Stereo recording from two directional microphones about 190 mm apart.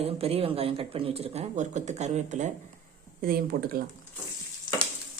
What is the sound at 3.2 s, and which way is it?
Speech, 50° right (ahead or behind).